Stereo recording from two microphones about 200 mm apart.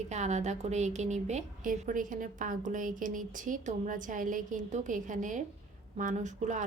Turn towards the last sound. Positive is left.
turn(degrees=-40)  # may be behind; listen again after turning